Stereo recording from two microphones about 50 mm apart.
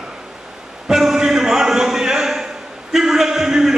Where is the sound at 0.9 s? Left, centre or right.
Centre.